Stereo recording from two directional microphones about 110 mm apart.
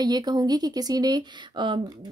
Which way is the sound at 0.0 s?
35° right (ahead or behind).